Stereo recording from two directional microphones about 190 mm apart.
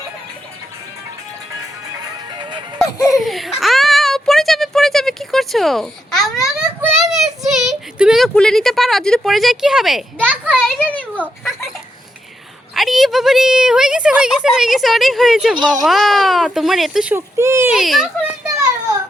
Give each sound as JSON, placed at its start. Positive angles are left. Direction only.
{"t": 2.3, "sound": "music", "side_deg": -25}
{"t": 3.2, "sound": "a woman's voice", "side_deg": 0}
{"t": 3.6, "sound": "a sound", "side_deg": 0}
{"t": 10.8, "sound": "a child's voice", "side_deg": 10}
{"t": 12.7, "sound": "a woman's voice", "side_deg": 0}
{"t": 15.5, "sound": "speech", "side_deg": -20}
{"t": 15.9, "sound": "a woman's voice", "side_deg": 0}